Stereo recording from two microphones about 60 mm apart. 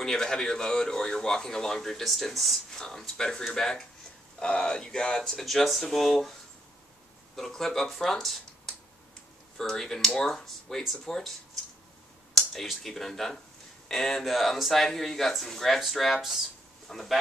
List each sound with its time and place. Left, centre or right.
0.0 s speech: centre
5.4 s speech: centre
7.3 s speech: centre